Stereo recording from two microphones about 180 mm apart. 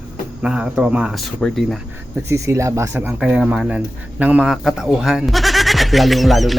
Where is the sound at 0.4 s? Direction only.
5° right (ahead or behind).